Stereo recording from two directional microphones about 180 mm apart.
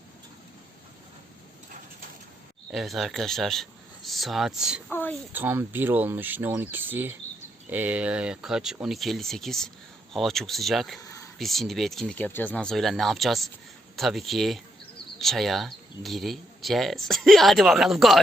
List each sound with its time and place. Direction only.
2.7 s speech: centre (ahead or behind)
4.9 s speech: 10° left (ahead or behind)
5.3 s speech: 10° right (ahead or behind)
11.0 s a sound: 20° left (ahead or behind)
11.3 s speech: centre (ahead or behind)